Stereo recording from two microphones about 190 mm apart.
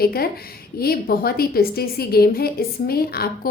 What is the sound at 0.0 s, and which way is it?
A woman's voice, 55° left (ahead or behind).